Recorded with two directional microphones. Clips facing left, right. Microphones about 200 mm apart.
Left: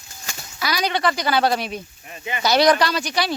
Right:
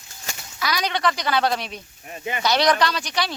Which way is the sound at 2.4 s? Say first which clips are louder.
Left 3 dB; 5° left (ahead or behind).